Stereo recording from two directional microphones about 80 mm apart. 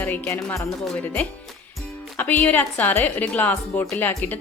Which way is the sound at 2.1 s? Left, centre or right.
Left.